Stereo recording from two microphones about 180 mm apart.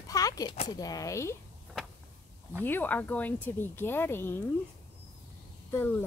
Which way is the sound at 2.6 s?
10° left (ahead or behind).